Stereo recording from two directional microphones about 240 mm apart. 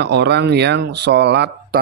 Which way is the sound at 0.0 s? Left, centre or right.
Right.